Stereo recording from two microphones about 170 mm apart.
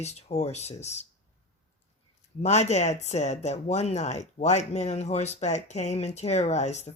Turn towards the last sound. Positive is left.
turn(degrees=40)  # may be behind; listen again after turning